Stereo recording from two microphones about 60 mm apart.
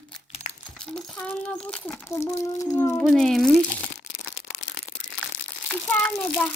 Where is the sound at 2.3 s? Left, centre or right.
Left.